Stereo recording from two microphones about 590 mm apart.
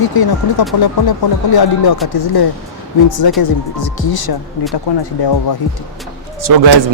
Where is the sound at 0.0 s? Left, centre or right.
Left.